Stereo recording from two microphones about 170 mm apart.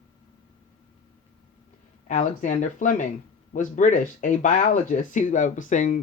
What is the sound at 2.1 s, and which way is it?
Speech, 45° left (ahead or behind).